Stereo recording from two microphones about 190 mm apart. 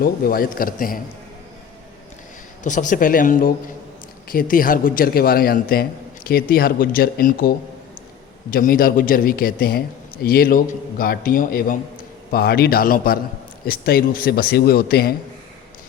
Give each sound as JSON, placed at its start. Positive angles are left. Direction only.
{"t": 0.0, "sound": "a man's voice", "side_deg": 50}
{"t": 2.6, "sound": "a man's voice", "side_deg": 45}